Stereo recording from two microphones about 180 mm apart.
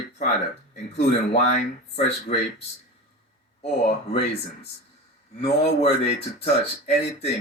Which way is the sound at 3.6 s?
35° left (ahead or behind).